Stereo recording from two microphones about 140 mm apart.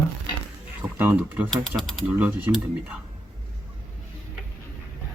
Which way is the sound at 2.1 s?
10° right (ahead or behind).